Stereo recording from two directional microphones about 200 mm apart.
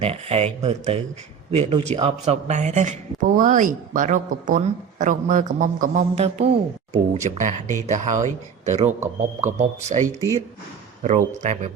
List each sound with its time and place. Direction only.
0.0 s speech: 30° right (ahead or behind)